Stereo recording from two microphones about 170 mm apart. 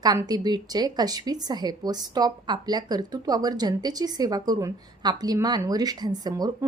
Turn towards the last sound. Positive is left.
turn(degrees=-25)  # may be behind; listen again after turning